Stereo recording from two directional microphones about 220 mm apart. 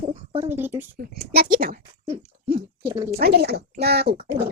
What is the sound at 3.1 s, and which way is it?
Speech, 45° right (ahead or behind).